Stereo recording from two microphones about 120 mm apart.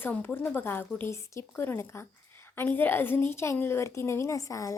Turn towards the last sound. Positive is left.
turn(degrees=25)  # may be behind; listen again after turning